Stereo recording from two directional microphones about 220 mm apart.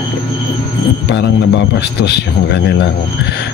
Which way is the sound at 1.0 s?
55° left (ahead or behind).